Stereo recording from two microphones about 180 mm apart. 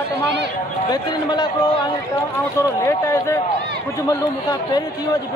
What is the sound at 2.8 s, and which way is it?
Speech, 15° left (ahead or behind).